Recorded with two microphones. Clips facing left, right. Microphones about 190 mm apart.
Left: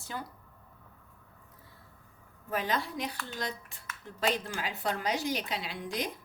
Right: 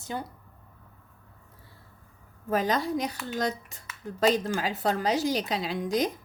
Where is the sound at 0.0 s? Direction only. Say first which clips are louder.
Right 5 dB; 20° right (ahead or behind).